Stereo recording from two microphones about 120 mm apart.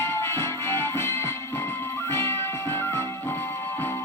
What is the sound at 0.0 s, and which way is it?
Music, 20° left (ahead or behind).